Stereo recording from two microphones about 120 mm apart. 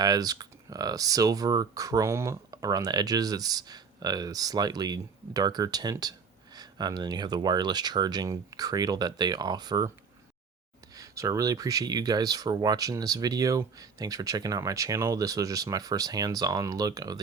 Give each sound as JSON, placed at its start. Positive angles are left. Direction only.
{"t": 0.0, "sound": "speech", "side_deg": -35}
{"t": 10.9, "sound": "speech", "side_deg": -30}